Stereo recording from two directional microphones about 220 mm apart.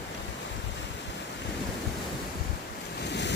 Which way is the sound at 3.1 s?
50° left (ahead or behind).